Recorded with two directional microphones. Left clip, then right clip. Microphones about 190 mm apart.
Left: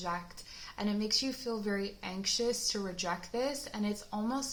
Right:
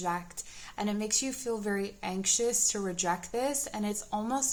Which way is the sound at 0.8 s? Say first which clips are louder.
Right 1 dB; 40° right (ahead or behind).